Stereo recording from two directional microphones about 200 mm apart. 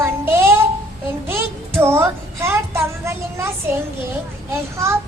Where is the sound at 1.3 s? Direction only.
10° right (ahead or behind).